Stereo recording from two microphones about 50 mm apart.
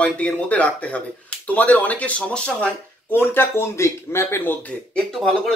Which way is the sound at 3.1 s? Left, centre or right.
Left.